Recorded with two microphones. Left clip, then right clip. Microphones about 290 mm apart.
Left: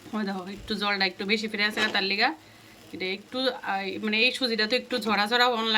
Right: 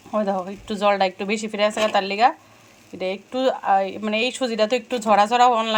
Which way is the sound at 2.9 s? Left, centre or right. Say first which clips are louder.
Right 6 dB; right.